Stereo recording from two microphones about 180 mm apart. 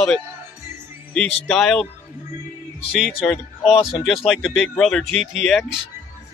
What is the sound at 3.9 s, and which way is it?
Speech, centre (ahead or behind).